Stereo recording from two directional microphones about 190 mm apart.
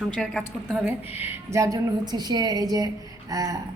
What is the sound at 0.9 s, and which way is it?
A woman's voice, 10° right (ahead or behind).